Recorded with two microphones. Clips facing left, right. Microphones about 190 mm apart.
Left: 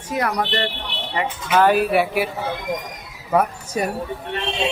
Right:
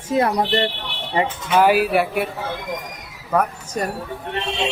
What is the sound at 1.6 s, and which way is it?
Speech, 5° right (ahead or behind).